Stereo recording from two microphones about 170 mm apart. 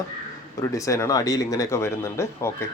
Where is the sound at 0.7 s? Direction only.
20° left (ahead or behind).